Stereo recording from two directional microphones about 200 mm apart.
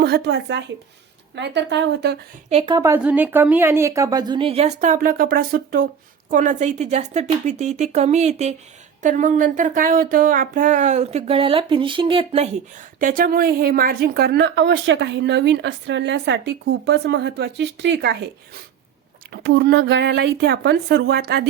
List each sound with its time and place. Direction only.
0.0 s speech: 55° right (ahead or behind)
2.5 s a woman's voice: 25° right (ahead or behind)
13.0 s speech: 45° right (ahead or behind)
19.3 s speech: 60° right (ahead or behind)